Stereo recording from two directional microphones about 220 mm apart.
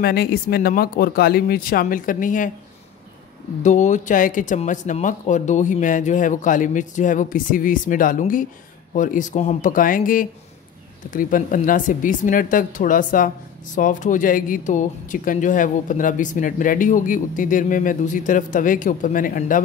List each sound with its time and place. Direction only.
0.0 s speech: 45° left (ahead or behind)
3.6 s speech: 35° left (ahead or behind)